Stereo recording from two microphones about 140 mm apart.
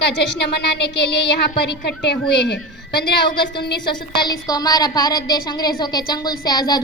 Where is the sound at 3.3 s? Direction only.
35° left (ahead or behind).